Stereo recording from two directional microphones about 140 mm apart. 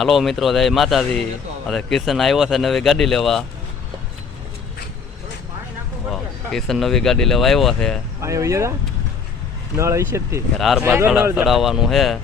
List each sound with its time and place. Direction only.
0.0 s speech: centre (ahead or behind)
6.1 s speech: centre (ahead or behind)
8.2 s speech: 20° right (ahead or behind)
9.7 s speech: 20° right (ahead or behind)
10.6 s speech: centre (ahead or behind)
10.8 s speech: 15° right (ahead or behind)